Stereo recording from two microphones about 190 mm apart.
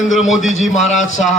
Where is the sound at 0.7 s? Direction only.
40° left (ahead or behind).